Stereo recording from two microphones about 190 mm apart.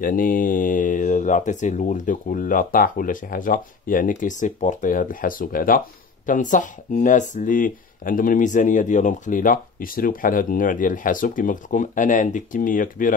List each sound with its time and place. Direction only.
0.0 s speech: 45° left (ahead or behind)